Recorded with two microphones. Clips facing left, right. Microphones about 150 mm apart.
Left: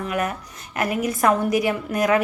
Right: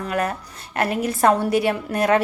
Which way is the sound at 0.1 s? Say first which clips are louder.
Right 4 dB; 35° right (ahead or behind).